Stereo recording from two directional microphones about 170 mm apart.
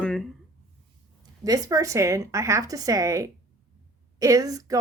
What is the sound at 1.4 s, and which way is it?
A woman's voice, 20° right (ahead or behind).